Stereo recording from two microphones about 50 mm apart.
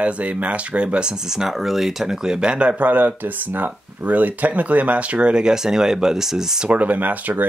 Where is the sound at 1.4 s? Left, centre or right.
Centre.